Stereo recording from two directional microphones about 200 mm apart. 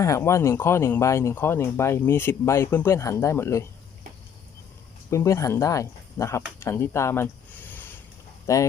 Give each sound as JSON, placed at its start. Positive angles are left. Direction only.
{"t": 0.0, "sound": "speech", "side_deg": 15}
{"t": 5.1, "sound": "speech", "side_deg": 15}
{"t": 6.6, "sound": "a sound", "side_deg": 15}
{"t": 8.5, "sound": "speech", "side_deg": 15}